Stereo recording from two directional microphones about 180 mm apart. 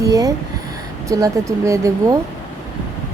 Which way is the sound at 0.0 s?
20° right (ahead or behind).